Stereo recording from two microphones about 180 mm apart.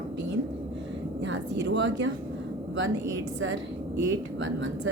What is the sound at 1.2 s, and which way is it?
Vehicle, 85° right.